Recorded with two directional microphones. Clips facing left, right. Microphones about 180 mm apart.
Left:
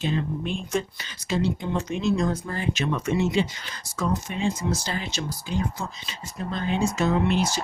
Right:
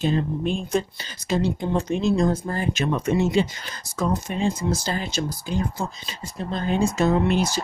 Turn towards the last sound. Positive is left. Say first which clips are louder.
# right 3 dB
turn(degrees=-45)  # may be behind; listen again after turning